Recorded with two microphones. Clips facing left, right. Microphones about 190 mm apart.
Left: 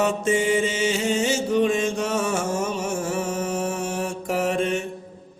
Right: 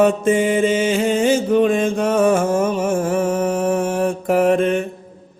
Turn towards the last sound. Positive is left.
turn(degrees=-55)  # may be behind; listen again after turning